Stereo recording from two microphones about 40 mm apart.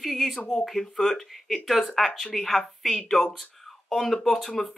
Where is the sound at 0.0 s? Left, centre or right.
Centre.